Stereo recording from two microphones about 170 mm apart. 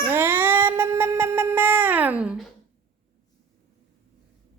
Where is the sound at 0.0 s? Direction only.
10° right (ahead or behind).